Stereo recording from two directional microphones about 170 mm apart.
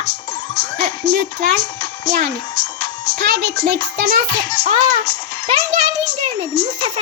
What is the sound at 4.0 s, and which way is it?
Speech, 60° right (ahead or behind).